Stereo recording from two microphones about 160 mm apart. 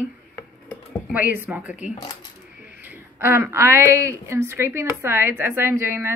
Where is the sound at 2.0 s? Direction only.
25° left (ahead or behind).